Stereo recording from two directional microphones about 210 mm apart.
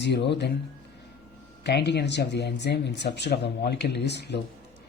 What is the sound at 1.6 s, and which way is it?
Speech, 50° left (ahead or behind).